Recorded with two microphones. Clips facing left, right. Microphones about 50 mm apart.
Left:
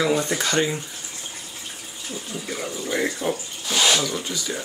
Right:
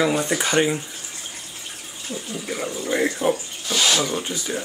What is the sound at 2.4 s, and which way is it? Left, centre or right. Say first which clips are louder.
Speech: right 3 dB; centre.